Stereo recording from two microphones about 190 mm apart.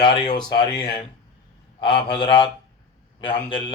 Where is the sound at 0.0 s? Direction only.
25° left (ahead or behind).